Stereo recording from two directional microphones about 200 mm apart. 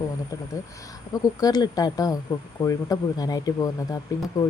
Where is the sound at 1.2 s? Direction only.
20° left (ahead or behind).